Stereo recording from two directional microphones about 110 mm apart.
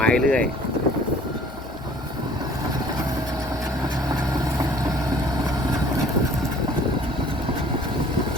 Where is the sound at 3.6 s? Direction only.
35° right (ahead or behind).